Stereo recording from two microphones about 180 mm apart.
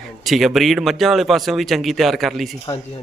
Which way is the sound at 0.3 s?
Centre (ahead or behind).